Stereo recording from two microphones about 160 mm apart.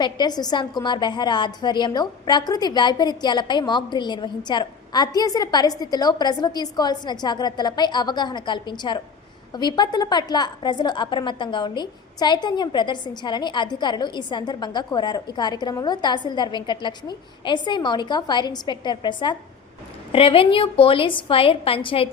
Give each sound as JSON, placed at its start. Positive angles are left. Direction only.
{"t": 0.0, "sound": "a woman's voice", "side_deg": 25}